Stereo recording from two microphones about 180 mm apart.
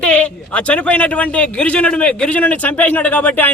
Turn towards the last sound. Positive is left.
turn(degrees=10)  # may be behind; listen again after turning